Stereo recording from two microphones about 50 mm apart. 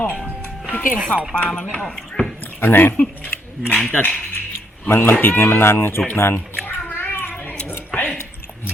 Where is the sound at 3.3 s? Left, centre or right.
Left.